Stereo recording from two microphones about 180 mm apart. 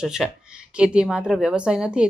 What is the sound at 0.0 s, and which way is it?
Speech, 5° right (ahead or behind).